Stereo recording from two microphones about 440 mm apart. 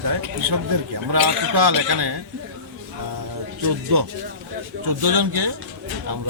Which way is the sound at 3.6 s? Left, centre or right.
Right.